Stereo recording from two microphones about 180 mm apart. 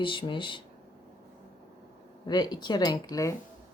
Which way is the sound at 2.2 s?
25° left (ahead or behind).